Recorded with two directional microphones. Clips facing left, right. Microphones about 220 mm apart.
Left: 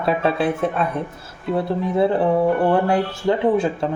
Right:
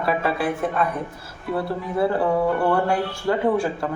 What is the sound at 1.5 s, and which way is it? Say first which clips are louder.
Speech: left 4 dB; 20° left (ahead or behind).